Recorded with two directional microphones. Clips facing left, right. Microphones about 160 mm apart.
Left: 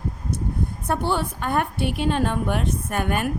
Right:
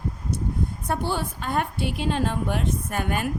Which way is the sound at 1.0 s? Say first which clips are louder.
Left 3 dB; 60° left (ahead or behind).